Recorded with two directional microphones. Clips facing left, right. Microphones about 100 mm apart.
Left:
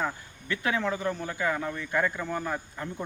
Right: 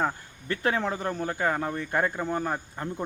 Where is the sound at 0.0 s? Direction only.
40° right (ahead or behind).